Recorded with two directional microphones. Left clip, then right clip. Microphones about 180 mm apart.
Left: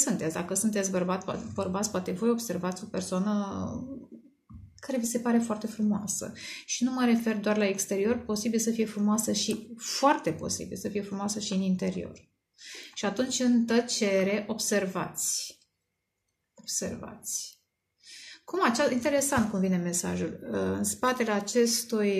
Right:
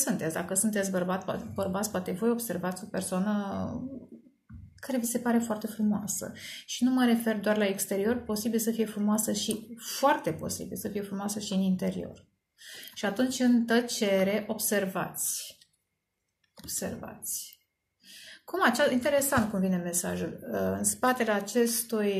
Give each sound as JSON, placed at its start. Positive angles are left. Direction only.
{"t": 0.0, "sound": "speech", "side_deg": 30}
{"t": 5.1, "sound": "speech", "side_deg": 30}
{"t": 16.6, "sound": "speech", "side_deg": 30}
{"t": 18.3, "sound": "a woman's voice", "side_deg": 30}